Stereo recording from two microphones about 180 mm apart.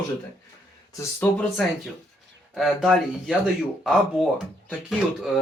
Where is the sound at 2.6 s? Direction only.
Centre (ahead or behind).